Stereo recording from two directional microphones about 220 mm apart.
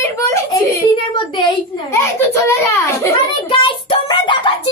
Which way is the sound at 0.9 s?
20° left (ahead or behind).